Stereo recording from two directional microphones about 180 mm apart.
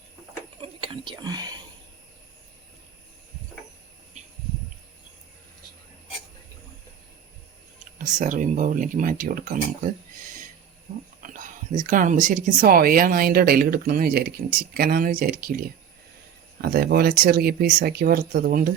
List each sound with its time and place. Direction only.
0.6 s whispering: 30° right (ahead or behind)
7.9 s speech: 45° right (ahead or behind)
11.2 s speech: 45° right (ahead or behind)